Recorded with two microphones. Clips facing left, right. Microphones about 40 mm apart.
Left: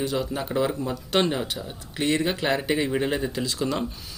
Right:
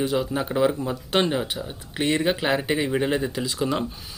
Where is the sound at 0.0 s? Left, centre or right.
Centre.